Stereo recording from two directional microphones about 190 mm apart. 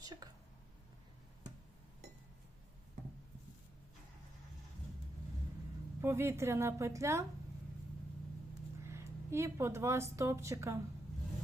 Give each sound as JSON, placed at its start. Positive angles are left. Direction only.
{"t": 0.0, "sound": "a sound", "side_deg": -20}
{"t": 6.0, "sound": "a woman's voice", "side_deg": -15}
{"t": 8.8, "sound": "speech", "side_deg": -15}